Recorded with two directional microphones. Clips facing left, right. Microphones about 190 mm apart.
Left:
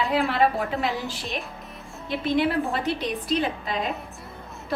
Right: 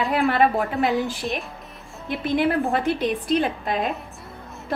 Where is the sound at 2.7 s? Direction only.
50° right (ahead or behind).